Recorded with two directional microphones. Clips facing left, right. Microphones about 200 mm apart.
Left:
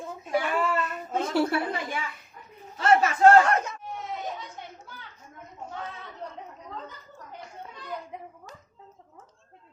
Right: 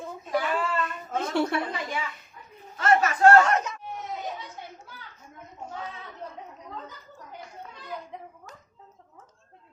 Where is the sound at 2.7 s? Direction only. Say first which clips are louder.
Left 1 dB; 30° left (ahead or behind).